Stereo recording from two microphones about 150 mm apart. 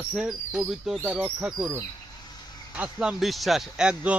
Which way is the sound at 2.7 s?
10° right (ahead or behind).